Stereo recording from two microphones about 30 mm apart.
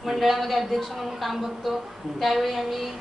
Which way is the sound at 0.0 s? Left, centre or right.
Centre.